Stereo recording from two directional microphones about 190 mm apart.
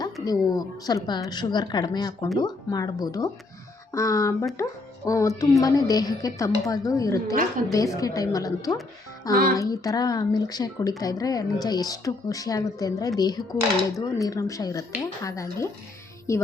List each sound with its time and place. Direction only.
0.0 s a woman's voice: 20° left (ahead or behind)